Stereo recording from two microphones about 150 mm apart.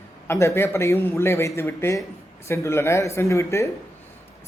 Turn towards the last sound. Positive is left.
turn(degrees=20)  # may be behind; listen again after turning